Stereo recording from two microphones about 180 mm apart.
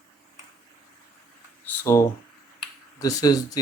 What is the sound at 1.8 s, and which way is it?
Speech, 15° left (ahead or behind).